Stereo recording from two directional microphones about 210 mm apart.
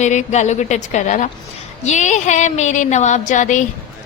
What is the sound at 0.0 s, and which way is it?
A woman's voice, 35° left (ahead or behind).